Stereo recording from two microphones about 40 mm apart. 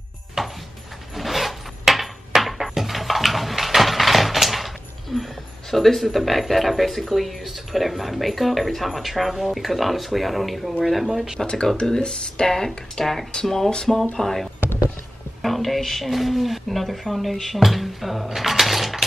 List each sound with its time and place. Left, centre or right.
0.4 s music: centre
1.1 s wood: centre
11.1 s speech: centre
11.4 s speech: centre